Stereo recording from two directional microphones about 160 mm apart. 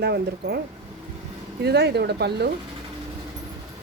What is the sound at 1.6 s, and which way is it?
Speech, 90° right.